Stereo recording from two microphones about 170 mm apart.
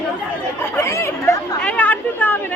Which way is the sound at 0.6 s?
15° left (ahead or behind).